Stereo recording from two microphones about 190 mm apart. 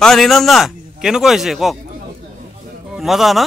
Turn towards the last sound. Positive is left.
turn(degrees=0)  # may be behind; listen again after turning